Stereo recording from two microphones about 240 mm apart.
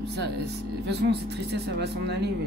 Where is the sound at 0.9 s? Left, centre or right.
Right.